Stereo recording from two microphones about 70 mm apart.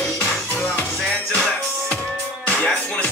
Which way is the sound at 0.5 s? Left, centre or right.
Centre.